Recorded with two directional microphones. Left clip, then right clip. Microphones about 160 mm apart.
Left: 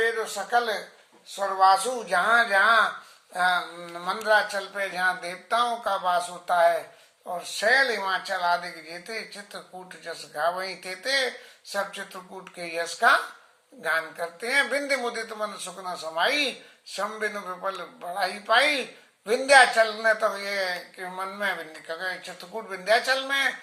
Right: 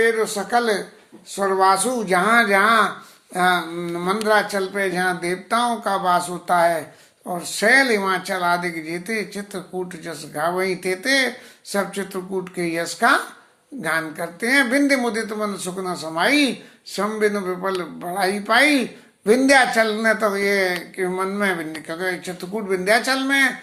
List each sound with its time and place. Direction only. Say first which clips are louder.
0.0 s speech: right 7 dB; 20° right (ahead or behind)